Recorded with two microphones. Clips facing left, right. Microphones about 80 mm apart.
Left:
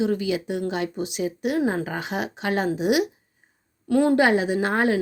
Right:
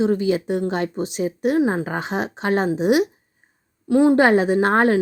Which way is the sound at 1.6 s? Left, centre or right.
Right.